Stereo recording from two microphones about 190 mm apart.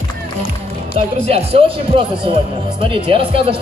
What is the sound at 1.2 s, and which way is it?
Speech, 30° right (ahead or behind).